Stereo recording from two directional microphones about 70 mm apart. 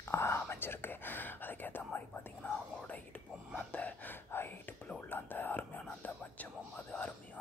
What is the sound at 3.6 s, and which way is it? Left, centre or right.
Whispering, centre.